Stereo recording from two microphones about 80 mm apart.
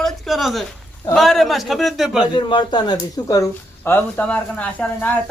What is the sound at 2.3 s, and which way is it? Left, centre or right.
Speech, left.